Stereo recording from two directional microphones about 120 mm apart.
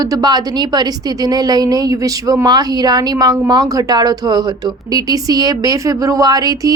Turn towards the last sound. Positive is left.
turn(degrees=-30)  # may be behind; listen again after turning